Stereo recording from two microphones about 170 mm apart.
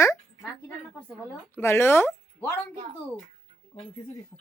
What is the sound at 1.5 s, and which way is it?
Speech, 15° left (ahead or behind).